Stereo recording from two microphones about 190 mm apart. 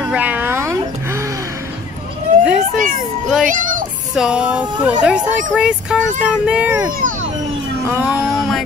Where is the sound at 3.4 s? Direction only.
45° right (ahead or behind).